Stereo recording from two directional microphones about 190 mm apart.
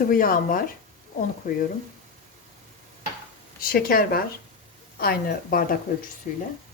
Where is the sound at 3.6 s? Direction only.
50° left (ahead or behind).